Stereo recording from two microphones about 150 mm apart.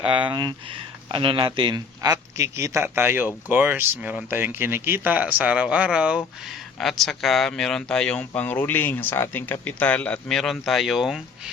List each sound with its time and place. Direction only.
0.0 s a man's voice: 35° right (ahead or behind); by 11.2 s centre (ahead or behind)